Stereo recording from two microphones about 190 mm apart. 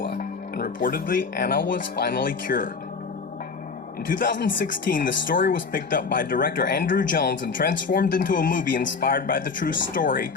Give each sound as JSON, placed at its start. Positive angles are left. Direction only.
{"t": 0.2, "sound": "speech", "side_deg": 50}
{"t": 4.1, "sound": "speech", "side_deg": 45}